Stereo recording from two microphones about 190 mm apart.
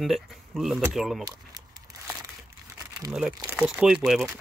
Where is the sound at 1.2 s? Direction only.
20° right (ahead or behind).